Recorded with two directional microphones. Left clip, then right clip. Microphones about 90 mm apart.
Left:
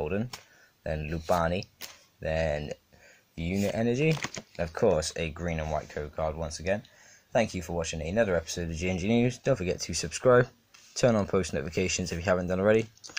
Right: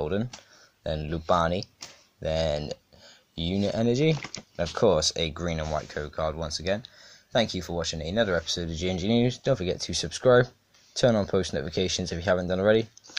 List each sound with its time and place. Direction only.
0.0 s speech: 10° right (ahead or behind)
3.3 s speech: 25° right (ahead or behind)
3.6 s speech: 15° right (ahead or behind)
7.3 s speech: 5° left (ahead or behind)